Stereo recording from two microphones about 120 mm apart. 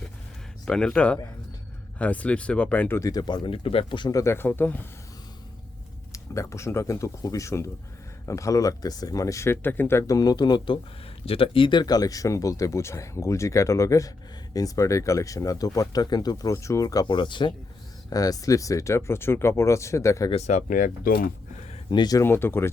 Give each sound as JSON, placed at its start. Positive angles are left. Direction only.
{"t": 0.6, "sound": "speech", "side_deg": 5}
{"t": 3.0, "sound": "speech", "side_deg": 30}
{"t": 4.1, "sound": "speech", "side_deg": 25}
{"t": 6.3, "sound": "speech", "side_deg": 25}
{"t": 11.3, "sound": "speech", "side_deg": 50}
{"t": 18.1, "sound": "speech", "side_deg": 30}
{"t": 20.3, "sound": "speech", "side_deg": 75}
{"t": 21.8, "sound": "speech", "side_deg": 35}
{"t": 22.2, "sound": "speech", "side_deg": 20}